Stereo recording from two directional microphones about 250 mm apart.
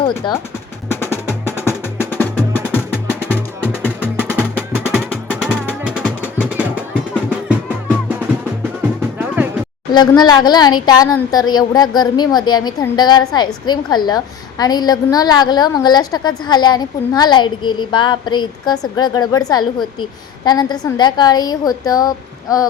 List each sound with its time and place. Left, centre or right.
0.2 s speech: centre
0.9 s music: centre
4.2 s music: centre
9.0 s music: centre
9.9 s a woman's voice: centre